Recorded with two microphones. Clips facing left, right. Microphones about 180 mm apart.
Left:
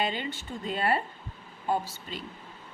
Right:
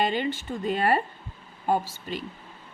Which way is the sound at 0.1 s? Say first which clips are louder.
Right 7 dB; 60° right (ahead or behind).